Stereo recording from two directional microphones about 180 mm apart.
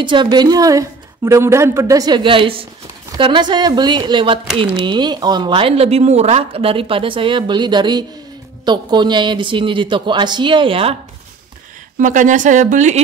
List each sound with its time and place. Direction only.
0.0 s a woman's voice: 25° right (ahead or behind)
12.0 s speech: 45° right (ahead or behind)